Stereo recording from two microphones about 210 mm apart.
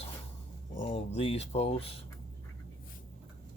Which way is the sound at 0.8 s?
30° left (ahead or behind).